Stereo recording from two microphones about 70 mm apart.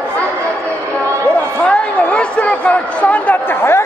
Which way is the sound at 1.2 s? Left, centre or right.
Centre.